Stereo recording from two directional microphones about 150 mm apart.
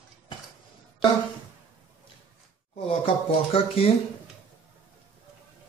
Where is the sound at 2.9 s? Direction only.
40° left (ahead or behind).